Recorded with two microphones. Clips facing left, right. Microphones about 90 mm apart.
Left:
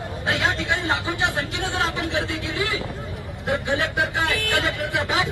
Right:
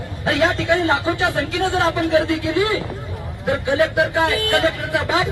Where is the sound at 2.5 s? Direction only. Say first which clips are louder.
Right 7 dB; 20° right (ahead or behind).